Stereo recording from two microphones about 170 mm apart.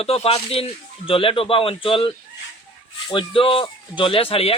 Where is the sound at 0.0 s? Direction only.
35° left (ahead or behind).